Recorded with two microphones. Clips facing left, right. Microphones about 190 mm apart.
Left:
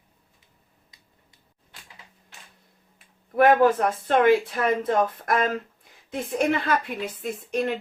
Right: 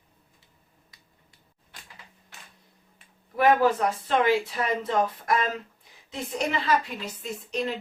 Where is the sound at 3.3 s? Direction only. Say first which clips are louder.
Left 3 dB; 50° left (ahead or behind).